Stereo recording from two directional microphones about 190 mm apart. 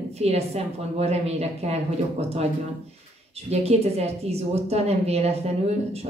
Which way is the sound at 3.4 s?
35° right (ahead or behind).